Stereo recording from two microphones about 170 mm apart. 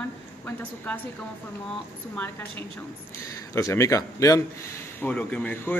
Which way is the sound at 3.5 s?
20° left (ahead or behind).